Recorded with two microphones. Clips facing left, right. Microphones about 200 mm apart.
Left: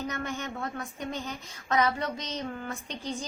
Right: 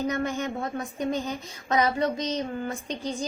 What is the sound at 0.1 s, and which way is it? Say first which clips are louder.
A woman's voice: right 6 dB; 20° right (ahead or behind).